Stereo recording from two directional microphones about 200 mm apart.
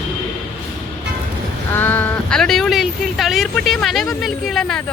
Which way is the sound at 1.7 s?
10° left (ahead or behind).